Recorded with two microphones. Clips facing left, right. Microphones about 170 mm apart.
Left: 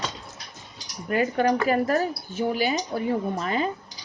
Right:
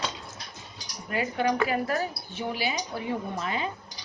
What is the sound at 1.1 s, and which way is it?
A woman's voice, 45° left (ahead or behind).